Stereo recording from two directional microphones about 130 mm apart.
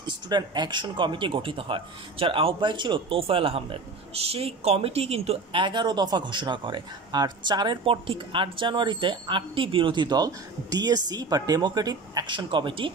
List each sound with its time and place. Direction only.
0.0 s speech: 35° right (ahead or behind)